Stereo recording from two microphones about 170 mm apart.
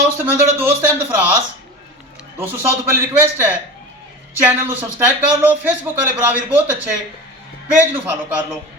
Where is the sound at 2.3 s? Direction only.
10° right (ahead or behind).